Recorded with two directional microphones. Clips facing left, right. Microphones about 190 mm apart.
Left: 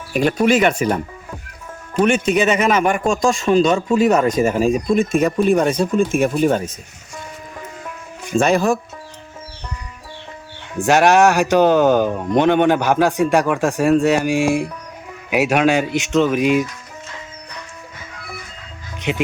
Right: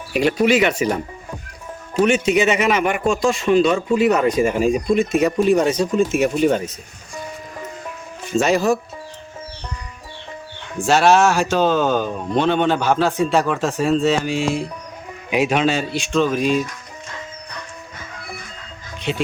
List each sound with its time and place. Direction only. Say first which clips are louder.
0.1 s a man's voice: left 1 dB; 50° left (ahead or behind)
2.0 s a man's voice: left 1 dB; 50° left (ahead or behind)
8.4 s a man's voice: left 1 dB; 55° left (ahead or behind)
10.8 s speech: left 2 dB; 15° left (ahead or behind)
18.9 s music: left 2 dB; 15° left (ahead or behind)